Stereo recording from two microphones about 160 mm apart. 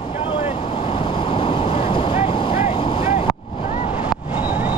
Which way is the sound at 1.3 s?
30° left (ahead or behind).